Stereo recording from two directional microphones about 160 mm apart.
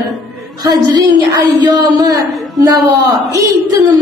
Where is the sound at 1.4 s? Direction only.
25° right (ahead or behind).